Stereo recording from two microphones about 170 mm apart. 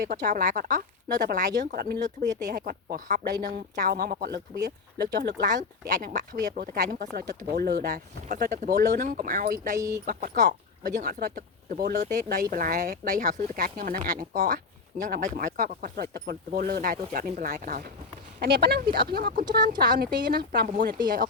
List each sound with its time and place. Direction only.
0.0 s speech: 55° right (ahead or behind)
9.7 s speech: 20° right (ahead or behind)
10.1 s speech: 60° right (ahead or behind)
11.9 s speech: 50° right (ahead or behind)
18.3 s speech: 70° right (ahead or behind)